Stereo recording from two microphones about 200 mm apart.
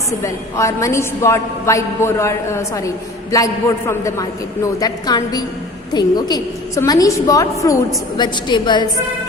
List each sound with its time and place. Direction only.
0.1 s a woman's voice: 15° left (ahead or behind)